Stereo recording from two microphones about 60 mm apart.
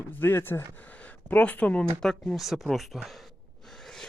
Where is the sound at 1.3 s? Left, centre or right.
Left.